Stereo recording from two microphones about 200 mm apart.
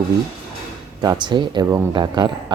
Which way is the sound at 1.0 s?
20° right (ahead or behind).